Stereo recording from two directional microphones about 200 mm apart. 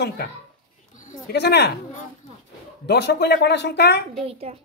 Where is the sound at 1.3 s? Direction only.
55° left (ahead or behind).